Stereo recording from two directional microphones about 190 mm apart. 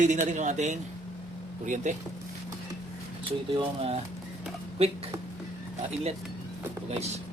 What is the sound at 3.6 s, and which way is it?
Speech, 30° right (ahead or behind).